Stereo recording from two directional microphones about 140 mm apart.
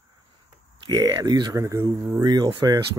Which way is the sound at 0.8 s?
30° right (ahead or behind).